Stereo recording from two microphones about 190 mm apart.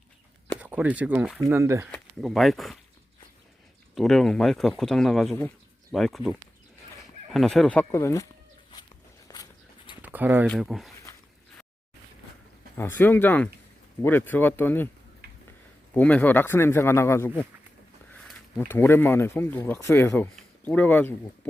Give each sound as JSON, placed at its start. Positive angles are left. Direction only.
{"t": 0.6, "sound": "speech", "side_deg": -10}
{"t": 1.9, "sound": "speech", "side_deg": 0}
{"t": 3.9, "sound": "speech", "side_deg": 0}
{"t": 7.9, "sound": "speech", "side_deg": 15}
{"t": 9.2, "sound": "dog", "side_deg": 20}
{"t": 10.0, "sound": "a sound", "side_deg": -10}
{"t": 10.5, "sound": "speech", "side_deg": 0}
{"t": 12.7, "sound": "speech", "side_deg": 10}
{"t": 16.0, "sound": "speech", "side_deg": 10}
{"t": 18.1, "sound": "a sound", "side_deg": 10}
{"t": 18.7, "sound": "speech", "side_deg": 10}